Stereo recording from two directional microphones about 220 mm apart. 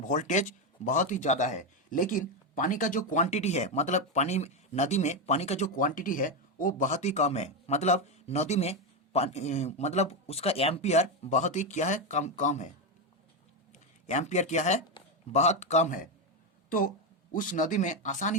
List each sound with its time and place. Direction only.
0.0 s speech: 35° left (ahead or behind)
13.7 s speech: 30° left (ahead or behind)
17.3 s speech: 35° left (ahead or behind)